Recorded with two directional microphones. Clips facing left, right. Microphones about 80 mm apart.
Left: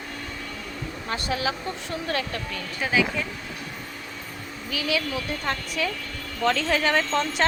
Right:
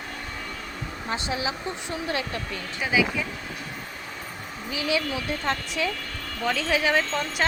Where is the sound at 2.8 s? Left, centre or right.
Centre.